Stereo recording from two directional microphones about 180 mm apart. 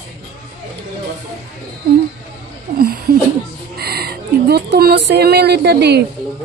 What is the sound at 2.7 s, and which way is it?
A woman's voice, 55° right (ahead or behind).